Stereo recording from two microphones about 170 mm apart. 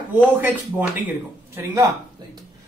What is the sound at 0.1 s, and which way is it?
Speech, 10° right (ahead or behind).